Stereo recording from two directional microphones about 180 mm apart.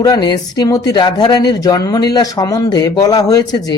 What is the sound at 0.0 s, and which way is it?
Speech, 20° left (ahead or behind).